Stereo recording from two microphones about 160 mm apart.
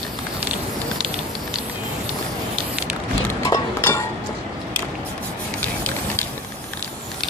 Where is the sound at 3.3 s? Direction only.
20° left (ahead or behind).